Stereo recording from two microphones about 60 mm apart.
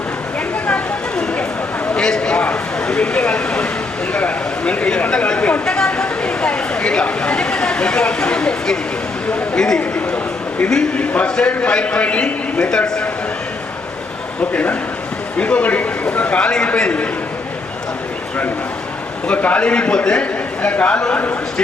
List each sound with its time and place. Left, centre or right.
0.7 s a sound: centre
9.3 s a man's voice: centre
14.5 s a man's voice: left
19.3 s a man's voice: left